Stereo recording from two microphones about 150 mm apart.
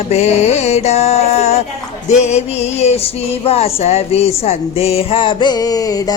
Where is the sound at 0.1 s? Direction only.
45° left (ahead or behind).